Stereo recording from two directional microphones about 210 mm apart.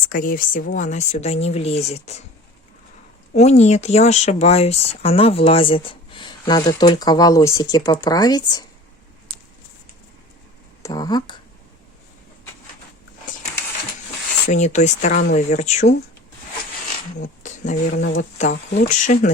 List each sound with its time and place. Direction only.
0.1 s speech: 40° left (ahead or behind)
3.3 s speech: 30° left (ahead or behind)
10.8 s speech: 20° left (ahead or behind)
14.5 s speech: 35° left (ahead or behind)
17.4 s a sound: 35° left (ahead or behind)
18.2 s speech: 35° left (ahead or behind)